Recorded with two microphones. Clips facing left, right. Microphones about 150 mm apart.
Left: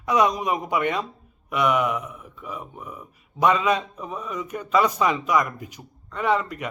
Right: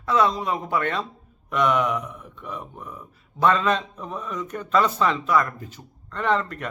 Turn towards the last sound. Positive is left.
turn(degrees=10)  # may be behind; listen again after turning